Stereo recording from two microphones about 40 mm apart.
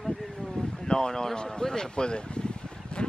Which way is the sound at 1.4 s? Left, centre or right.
Centre.